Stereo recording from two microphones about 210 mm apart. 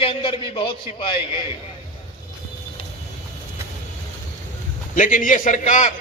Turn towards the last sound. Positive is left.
turn(degrees=35)  # may be behind; listen again after turning